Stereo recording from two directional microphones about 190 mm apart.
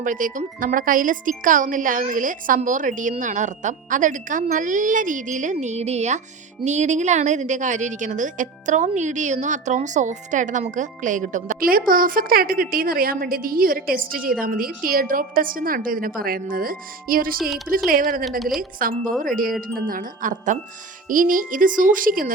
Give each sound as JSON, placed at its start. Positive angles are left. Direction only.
{"t": 0.0, "sound": "a woman's voice", "side_deg": -45}
{"t": 17.7, "sound": "speech", "side_deg": -5}
{"t": 18.8, "sound": "speech", "side_deg": -50}